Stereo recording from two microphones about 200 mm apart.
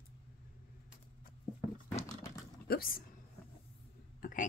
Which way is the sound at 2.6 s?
45° left (ahead or behind).